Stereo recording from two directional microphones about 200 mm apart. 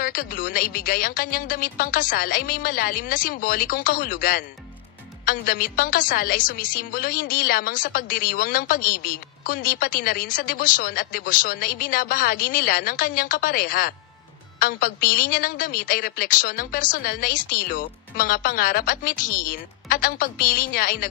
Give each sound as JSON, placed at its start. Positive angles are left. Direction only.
{"t": 0.0, "sound": "a woman's voice", "side_deg": 45}